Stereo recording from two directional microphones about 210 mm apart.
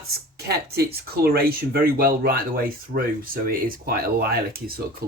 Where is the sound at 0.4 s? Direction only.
45° right (ahead or behind).